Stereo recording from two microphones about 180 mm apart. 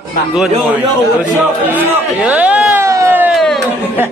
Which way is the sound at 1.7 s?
10° right (ahead or behind).